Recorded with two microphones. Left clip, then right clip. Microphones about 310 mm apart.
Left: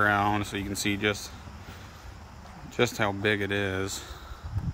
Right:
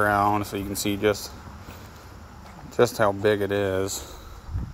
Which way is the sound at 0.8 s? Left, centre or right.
Centre.